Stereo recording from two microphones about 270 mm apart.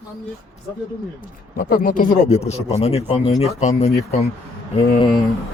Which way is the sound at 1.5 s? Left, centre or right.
Left.